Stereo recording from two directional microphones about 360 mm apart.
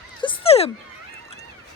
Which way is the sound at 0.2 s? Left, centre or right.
Centre.